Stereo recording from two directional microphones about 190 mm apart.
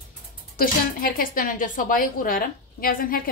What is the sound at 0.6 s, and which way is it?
A woman's voice, 50° left (ahead or behind).